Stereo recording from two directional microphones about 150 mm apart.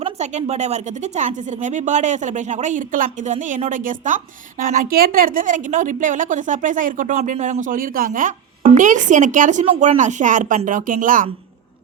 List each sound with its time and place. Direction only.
0.0 s a woman's voice: 50° right (ahead or behind); by 11.3 s 65° right (ahead or behind)